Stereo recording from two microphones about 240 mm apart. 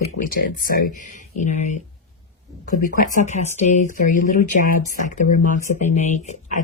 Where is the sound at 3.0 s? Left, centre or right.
Left.